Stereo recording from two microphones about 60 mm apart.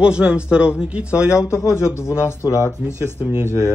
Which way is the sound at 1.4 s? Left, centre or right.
Left.